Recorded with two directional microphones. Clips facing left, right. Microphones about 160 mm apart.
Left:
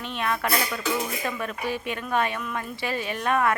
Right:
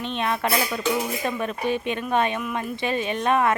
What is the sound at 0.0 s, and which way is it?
Speech, 25° right (ahead or behind).